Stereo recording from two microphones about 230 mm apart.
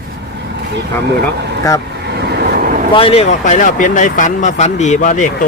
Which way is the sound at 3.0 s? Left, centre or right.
Left.